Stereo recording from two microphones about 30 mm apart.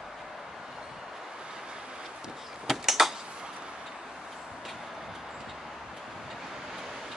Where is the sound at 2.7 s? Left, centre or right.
Centre.